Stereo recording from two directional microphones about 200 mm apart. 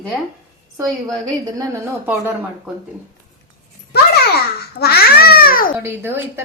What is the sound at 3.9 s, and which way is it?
Babbling, 55° left (ahead or behind).